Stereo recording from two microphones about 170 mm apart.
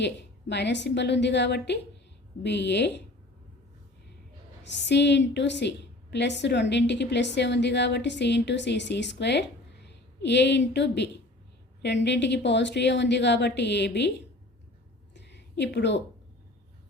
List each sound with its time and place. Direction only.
0.0 s a woman's voice: 90° left
4.6 s a woman's voice: 90° left
15.1 s a sound: 90° left